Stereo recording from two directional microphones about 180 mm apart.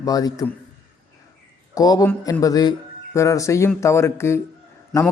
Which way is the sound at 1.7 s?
20° left (ahead or behind).